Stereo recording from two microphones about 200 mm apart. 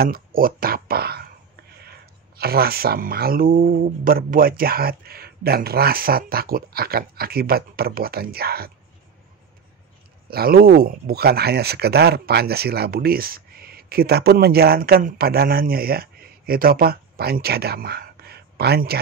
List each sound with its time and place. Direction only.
0.0 s speech: 45° right (ahead or behind)
2.3 s speech: 50° right (ahead or behind)
10.3 s speech: 50° right (ahead or behind)